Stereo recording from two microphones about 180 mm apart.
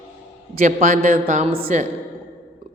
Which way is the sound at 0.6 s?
50° right (ahead or behind).